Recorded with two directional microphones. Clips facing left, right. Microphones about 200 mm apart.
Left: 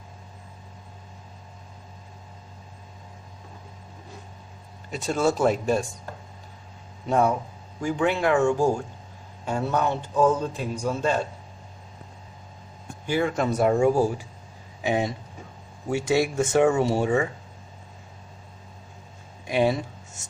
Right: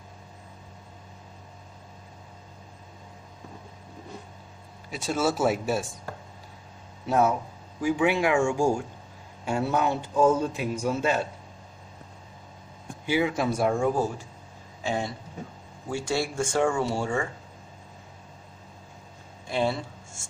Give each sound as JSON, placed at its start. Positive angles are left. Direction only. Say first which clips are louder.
{"t": 4.9, "sound": "speech", "louder": "left 3 dB", "side_deg": -5}
{"t": 7.1, "sound": "a man's voice", "louder": "left 1 dB", "side_deg": -5}
{"t": 13.1, "sound": "speech", "louder": "left 1 dB", "side_deg": -5}
{"t": 19.4, "sound": "speech", "louder": "left 4 dB", "side_deg": 15}